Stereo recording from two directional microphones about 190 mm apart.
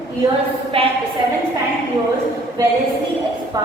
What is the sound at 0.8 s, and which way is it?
Speech, 30° right (ahead or behind).